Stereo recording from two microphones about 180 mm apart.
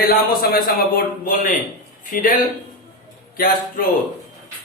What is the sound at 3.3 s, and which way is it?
Speech, 55° left (ahead or behind).